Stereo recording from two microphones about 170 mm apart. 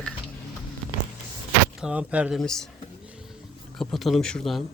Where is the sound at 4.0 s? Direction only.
Centre (ahead or behind).